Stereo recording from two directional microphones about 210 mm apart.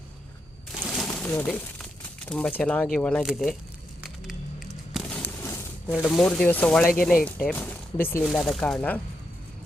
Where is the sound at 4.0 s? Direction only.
Centre (ahead or behind).